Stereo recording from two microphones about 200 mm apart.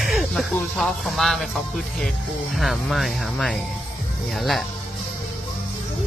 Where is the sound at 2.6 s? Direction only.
Centre (ahead or behind).